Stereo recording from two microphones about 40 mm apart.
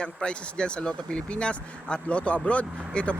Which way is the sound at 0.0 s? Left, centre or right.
Left.